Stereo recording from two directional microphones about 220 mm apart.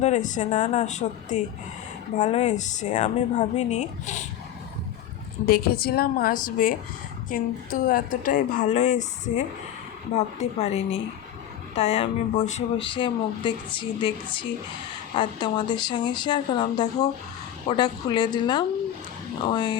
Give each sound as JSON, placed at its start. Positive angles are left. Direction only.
{"t": 0.0, "sound": "a woman's voice", "side_deg": 35}
{"t": 5.5, "sound": "a woman's voice", "side_deg": 45}